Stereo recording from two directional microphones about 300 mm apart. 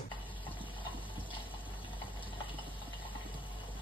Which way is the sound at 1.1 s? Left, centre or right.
Centre.